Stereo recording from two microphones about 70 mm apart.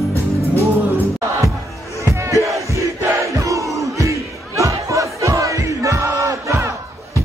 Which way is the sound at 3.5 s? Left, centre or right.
Right.